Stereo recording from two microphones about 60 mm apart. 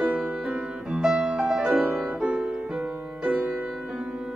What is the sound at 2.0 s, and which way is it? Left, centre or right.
Music, centre.